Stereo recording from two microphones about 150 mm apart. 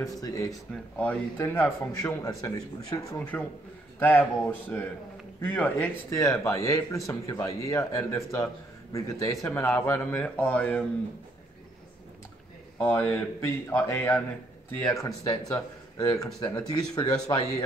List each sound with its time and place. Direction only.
0.0 s speech: 20° left (ahead or behind)
0.9 s speech: 10° left (ahead or behind)
3.3 s speech: 10° left (ahead or behind)
6.0 s speech: 20° left (ahead or behind)
12.7 s speech: 15° left (ahead or behind)
15.0 s speech: 25° left (ahead or behind)